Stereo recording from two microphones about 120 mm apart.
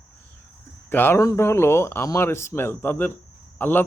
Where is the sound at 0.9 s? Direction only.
20° left (ahead or behind).